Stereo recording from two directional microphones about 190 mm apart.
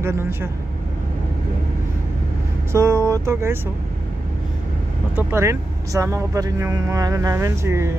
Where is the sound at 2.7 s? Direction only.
15° right (ahead or behind).